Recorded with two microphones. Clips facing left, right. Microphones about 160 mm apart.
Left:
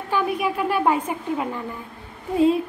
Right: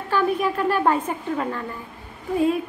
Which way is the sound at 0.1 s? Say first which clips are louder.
Right 2 dB; 10° left (ahead or behind).